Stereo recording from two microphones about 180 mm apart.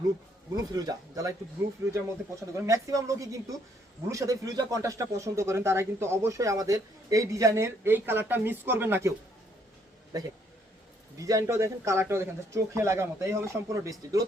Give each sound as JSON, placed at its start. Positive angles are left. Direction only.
{"t": 0.5, "sound": "a man's voice", "side_deg": -20}
{"t": 10.1, "sound": "a man's voice", "side_deg": -20}